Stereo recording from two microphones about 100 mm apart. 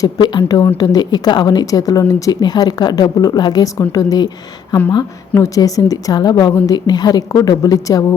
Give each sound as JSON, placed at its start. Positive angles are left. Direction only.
{"t": 0.0, "sound": "a woman's voice", "side_deg": 50}
{"t": 5.3, "sound": "a woman's voice", "side_deg": 35}